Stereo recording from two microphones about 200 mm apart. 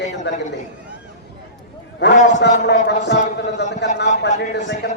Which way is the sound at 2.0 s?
60° left (ahead or behind).